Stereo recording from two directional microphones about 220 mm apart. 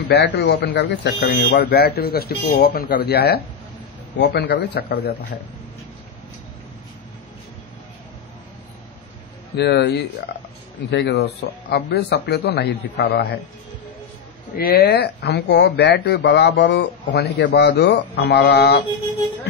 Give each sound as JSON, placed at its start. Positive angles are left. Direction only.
{"t": 0.1, "sound": "speech", "side_deg": 50}
{"t": 9.6, "sound": "speech", "side_deg": 50}
{"t": 14.6, "sound": "speech", "side_deg": 45}